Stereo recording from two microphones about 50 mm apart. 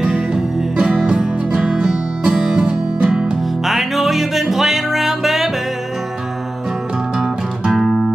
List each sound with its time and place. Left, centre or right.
0.0 s music: centre
3.6 s music: centre
7.7 s music: centre